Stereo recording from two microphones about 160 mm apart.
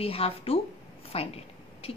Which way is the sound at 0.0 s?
35° left (ahead or behind).